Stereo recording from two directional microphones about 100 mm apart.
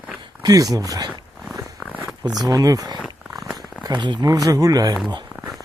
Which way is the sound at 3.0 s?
5° right (ahead or behind).